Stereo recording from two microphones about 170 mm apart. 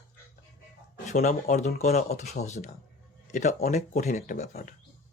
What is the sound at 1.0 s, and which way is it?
Speech, 45° left (ahead or behind).